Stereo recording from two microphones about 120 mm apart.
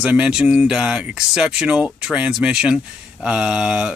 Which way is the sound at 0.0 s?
10° right (ahead or behind).